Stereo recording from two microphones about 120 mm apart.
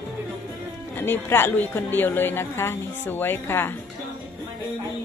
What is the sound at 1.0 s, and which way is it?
A woman's voice, 20° left (ahead or behind).